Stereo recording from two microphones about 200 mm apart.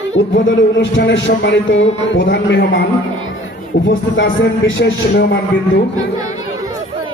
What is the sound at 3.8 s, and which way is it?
Speech, 65° left (ahead or behind).